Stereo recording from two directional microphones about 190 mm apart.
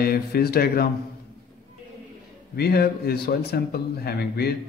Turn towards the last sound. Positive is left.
turn(degrees=55)  # may be behind; listen again after turning